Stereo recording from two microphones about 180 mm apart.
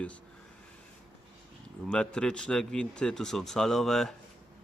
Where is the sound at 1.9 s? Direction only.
5° left (ahead or behind).